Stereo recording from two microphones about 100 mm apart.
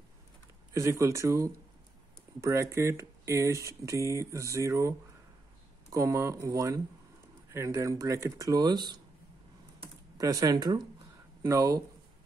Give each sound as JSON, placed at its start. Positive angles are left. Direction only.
{"t": 0.7, "sound": "speech", "side_deg": -30}
{"t": 10.1, "sound": "speech", "side_deg": -35}